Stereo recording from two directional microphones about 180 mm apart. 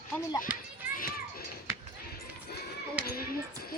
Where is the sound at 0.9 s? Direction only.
55° left (ahead or behind).